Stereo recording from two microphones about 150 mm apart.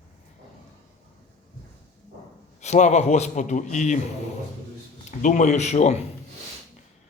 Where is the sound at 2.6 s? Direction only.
50° left (ahead or behind).